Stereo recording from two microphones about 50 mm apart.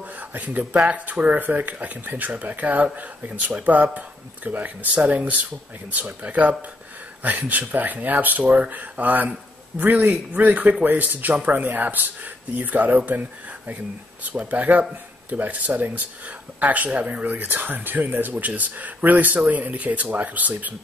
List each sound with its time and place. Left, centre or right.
0.3 s speech: right
14.2 s speech: right
17.4 s speech: right